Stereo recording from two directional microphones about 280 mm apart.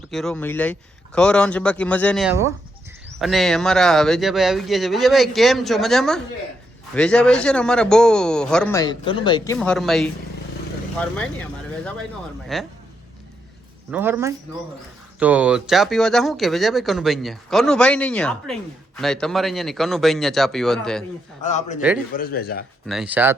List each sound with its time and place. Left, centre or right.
0.1 s speech: centre
2.3 s a man's voice: centre
3.2 s speech: centre
12.5 s speech: centre
13.9 s a man's voice: centre
21.4 s a man's voice: left
21.8 s speech: centre
22.1 s speech: left
22.9 s speech: centre